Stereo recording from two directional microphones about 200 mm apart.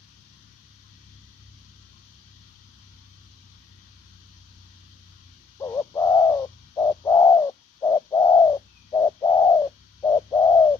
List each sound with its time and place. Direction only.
5.6 s bird: 20° left (ahead or behind)